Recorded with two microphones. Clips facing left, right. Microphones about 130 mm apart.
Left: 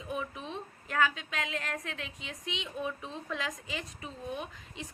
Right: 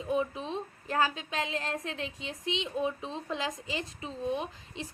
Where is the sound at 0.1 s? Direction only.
25° right (ahead or behind).